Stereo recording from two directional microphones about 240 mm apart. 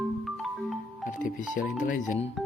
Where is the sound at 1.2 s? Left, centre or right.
Left.